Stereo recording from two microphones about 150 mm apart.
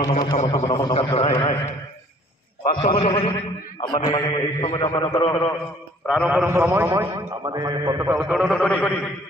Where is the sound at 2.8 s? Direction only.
35° left (ahead or behind).